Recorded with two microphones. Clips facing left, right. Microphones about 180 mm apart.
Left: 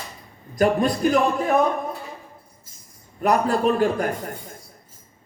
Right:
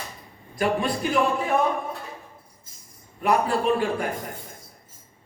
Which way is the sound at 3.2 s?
40° left (ahead or behind).